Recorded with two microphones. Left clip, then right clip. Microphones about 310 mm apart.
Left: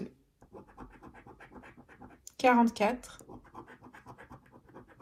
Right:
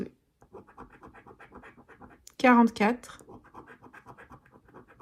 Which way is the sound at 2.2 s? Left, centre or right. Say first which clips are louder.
Right 4 dB; right.